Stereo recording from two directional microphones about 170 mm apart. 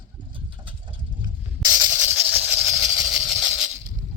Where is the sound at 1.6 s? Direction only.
20° right (ahead or behind).